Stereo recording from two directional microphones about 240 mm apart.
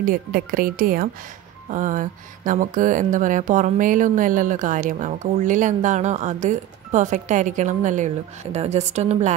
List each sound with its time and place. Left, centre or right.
0.0 s speech: right